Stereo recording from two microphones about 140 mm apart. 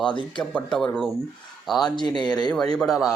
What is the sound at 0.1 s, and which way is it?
Speech, 35° left (ahead or behind).